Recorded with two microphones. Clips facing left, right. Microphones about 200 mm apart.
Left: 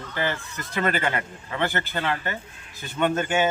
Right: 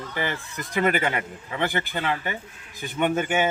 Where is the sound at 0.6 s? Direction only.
15° right (ahead or behind).